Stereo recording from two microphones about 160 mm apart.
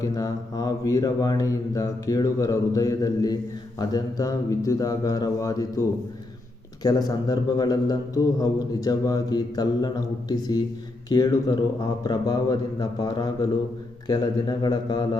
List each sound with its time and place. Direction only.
0.0 s a man's voice: 20° left (ahead or behind)
6.8 s a man's voice: 25° left (ahead or behind)